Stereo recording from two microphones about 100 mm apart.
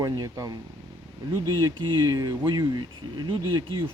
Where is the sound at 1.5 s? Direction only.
50° right (ahead or behind).